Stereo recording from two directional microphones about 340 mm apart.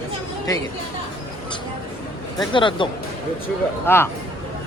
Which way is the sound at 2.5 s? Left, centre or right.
Centre.